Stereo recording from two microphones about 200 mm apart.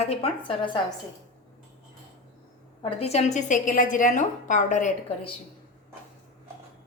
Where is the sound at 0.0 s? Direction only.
30° left (ahead or behind).